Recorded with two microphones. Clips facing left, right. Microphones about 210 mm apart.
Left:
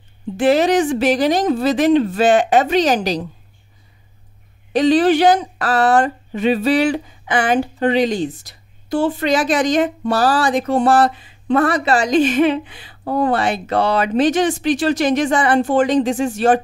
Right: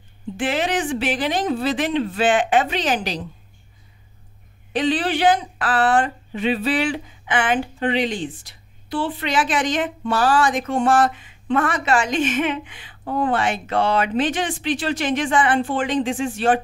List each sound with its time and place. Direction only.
0.4 s speech: 40° left (ahead or behind)
4.7 s speech: 40° left (ahead or behind)